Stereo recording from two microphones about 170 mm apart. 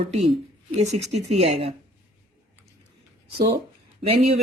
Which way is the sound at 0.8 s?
40° right (ahead or behind).